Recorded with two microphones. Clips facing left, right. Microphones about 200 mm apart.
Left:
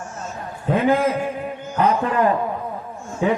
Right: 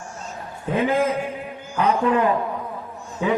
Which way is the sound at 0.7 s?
50° left (ahead or behind).